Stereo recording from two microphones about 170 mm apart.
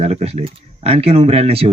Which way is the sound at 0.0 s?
40° right (ahead or behind).